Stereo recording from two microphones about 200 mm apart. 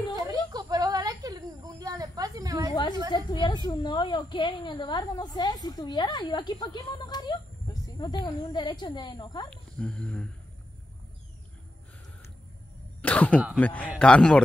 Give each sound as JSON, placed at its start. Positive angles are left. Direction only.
{"t": 0.3, "sound": "a sound", "side_deg": -20}
{"t": 3.1, "sound": "a woman's voice", "side_deg": 20}
{"t": 7.7, "sound": "snake", "side_deg": 20}
{"t": 8.0, "sound": "a woman's voice", "side_deg": 20}
{"t": 9.8, "sound": "speech", "side_deg": 5}
{"t": 13.0, "sound": "a sound", "side_deg": 5}
{"t": 13.6, "sound": "a man's voice", "side_deg": 5}